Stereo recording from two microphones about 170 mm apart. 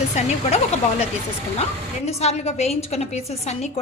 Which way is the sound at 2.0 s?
40° left (ahead or behind).